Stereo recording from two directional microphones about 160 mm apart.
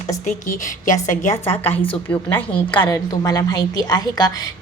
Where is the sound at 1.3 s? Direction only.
15° left (ahead or behind).